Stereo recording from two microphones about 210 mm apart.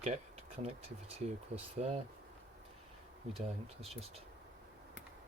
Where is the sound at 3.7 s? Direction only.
30° right (ahead or behind).